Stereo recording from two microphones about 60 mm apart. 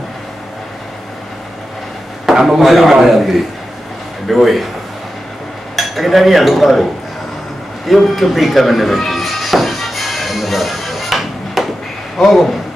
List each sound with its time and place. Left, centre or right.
2.2 s speech: centre
4.3 s speech: centre
5.8 s cutlery: centre
7.9 s music: centre
12.2 s speech: centre